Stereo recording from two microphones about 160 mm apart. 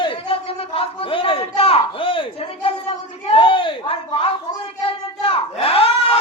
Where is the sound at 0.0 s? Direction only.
35° left (ahead or behind).